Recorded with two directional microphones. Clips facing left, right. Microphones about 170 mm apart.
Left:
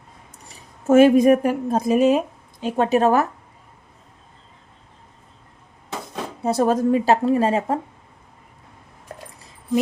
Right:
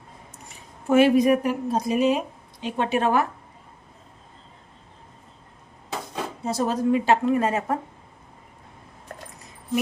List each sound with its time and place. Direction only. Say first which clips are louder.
0.4 s a woman's voice: left 6 dB; 45° left (ahead or behind)
6.4 s a woman's voice: left 5 dB; 55° left (ahead or behind); by 7.8 s 30° left (ahead or behind)